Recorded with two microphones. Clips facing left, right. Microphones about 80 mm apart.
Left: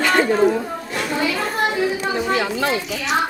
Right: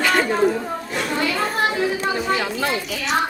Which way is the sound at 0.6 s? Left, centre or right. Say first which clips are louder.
Even; centre.